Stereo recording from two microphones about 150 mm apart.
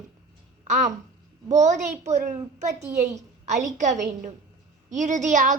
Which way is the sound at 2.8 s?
20° right (ahead or behind).